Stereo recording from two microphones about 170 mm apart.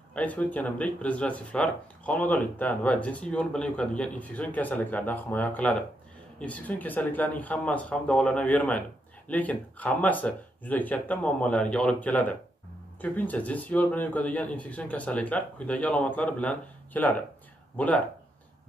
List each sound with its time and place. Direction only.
0.1 s speech: 10° left (ahead or behind)